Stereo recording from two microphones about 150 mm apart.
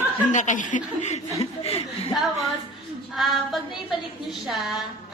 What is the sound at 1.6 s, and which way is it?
Speech, 40° left (ahead or behind).